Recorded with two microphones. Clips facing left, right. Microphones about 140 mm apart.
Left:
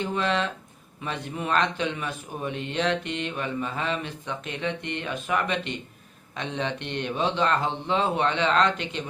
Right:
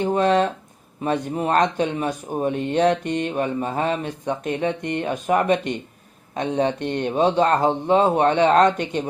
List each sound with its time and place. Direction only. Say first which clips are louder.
0.0 s speech: right 8 dB; 45° right (ahead or behind)